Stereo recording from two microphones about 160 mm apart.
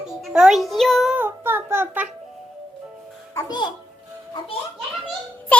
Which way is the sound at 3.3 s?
25° left (ahead or behind).